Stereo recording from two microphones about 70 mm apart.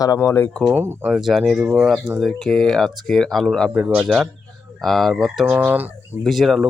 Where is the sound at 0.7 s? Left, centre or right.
Right.